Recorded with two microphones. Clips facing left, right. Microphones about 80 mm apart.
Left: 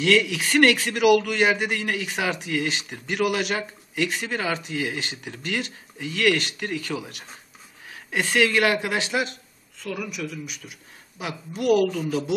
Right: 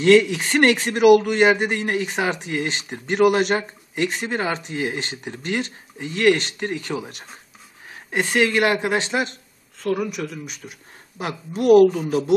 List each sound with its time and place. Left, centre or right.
0.0 s a man's voice: right